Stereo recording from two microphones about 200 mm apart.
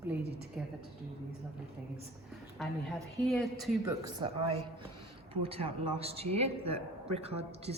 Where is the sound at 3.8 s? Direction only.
15° right (ahead or behind).